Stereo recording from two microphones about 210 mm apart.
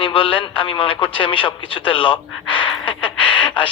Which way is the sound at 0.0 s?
25° left (ahead or behind).